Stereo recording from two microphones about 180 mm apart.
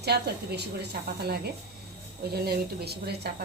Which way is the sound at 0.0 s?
65° right (ahead or behind).